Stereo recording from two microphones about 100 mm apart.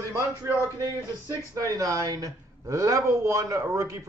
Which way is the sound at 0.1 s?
25° right (ahead or behind).